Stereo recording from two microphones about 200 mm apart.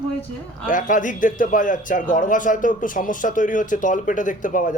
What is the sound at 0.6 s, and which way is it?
A man's voice, 40° left (ahead or behind).